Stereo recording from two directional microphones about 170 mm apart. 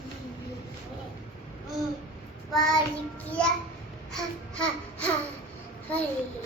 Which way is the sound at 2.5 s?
5° left (ahead or behind).